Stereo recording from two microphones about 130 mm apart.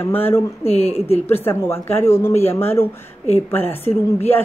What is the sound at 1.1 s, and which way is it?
Speech, 15° left (ahead or behind).